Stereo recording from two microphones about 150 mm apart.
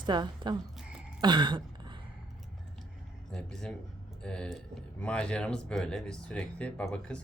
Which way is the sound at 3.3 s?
5° left (ahead or behind).